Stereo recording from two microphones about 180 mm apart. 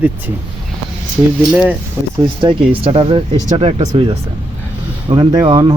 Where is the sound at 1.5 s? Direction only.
5° right (ahead or behind).